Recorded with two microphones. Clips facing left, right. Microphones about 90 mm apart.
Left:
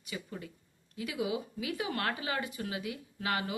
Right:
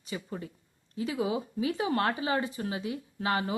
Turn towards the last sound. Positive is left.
turn(degrees=-30)  # may be behind; listen again after turning